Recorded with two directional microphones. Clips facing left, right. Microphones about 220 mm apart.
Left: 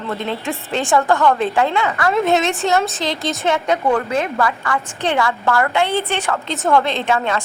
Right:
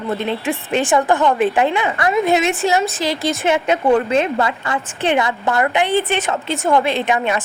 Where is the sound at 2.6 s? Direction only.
5° right (ahead or behind).